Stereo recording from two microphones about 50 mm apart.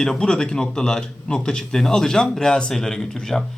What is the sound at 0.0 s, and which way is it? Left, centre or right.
Speech, centre.